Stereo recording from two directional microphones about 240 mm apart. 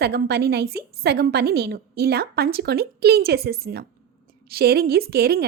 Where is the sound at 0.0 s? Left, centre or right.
Right.